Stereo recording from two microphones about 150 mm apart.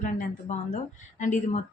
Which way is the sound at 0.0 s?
60° left (ahead or behind).